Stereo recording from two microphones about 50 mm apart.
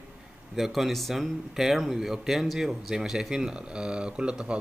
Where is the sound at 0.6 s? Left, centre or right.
Centre.